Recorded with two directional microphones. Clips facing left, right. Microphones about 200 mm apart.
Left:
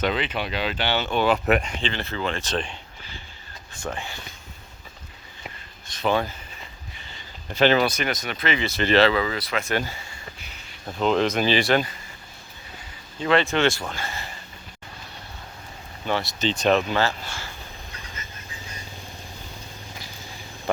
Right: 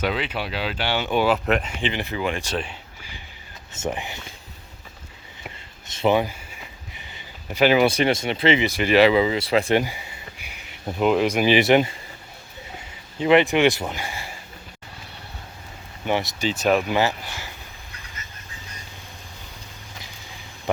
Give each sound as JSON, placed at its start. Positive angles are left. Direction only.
{"t": 0.0, "sound": "speech", "side_deg": -5}
{"t": 1.5, "sound": "speech", "side_deg": 5}
{"t": 1.8, "sound": "speech", "side_deg": -15}
{"t": 3.7, "sound": "speech", "side_deg": -20}
{"t": 5.9, "sound": "a sound", "side_deg": -20}
{"t": 7.9, "sound": "speech", "side_deg": -30}
{"t": 8.6, "sound": "speech", "side_deg": -10}
{"t": 9.7, "sound": "a sound", "side_deg": -15}
{"t": 11.1, "sound": "speech", "side_deg": -10}
{"t": 13.1, "sound": "speech", "side_deg": -15}
{"t": 16.0, "sound": "speech", "side_deg": -15}